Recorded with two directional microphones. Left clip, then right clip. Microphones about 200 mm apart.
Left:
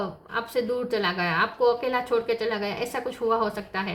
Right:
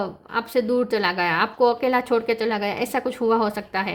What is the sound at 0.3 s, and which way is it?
A woman's voice, 55° right (ahead or behind).